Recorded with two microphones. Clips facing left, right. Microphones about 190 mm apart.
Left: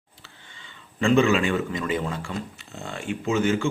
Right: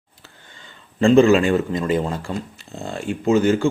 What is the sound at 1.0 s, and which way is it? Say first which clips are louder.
Speech: right 6 dB; 35° right (ahead or behind).